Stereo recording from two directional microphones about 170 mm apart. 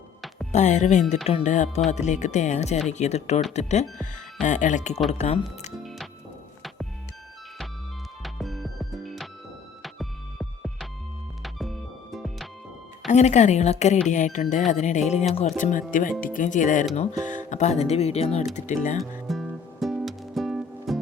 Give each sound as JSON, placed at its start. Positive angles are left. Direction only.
{"t": 0.5, "sound": "speech", "side_deg": 45}
{"t": 5.7, "sound": "music", "side_deg": 0}
{"t": 8.2, "sound": "music", "side_deg": 0}
{"t": 13.1, "sound": "speech", "side_deg": 45}
{"t": 19.3, "sound": "music", "side_deg": 0}